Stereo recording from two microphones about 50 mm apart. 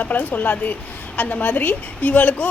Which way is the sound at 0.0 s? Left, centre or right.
Left.